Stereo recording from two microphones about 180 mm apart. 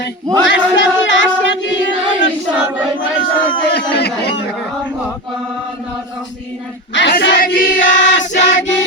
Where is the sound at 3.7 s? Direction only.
65° left (ahead or behind).